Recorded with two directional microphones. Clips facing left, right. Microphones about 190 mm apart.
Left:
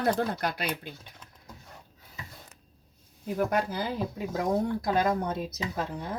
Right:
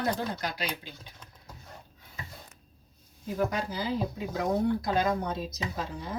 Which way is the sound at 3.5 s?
55° left (ahead or behind).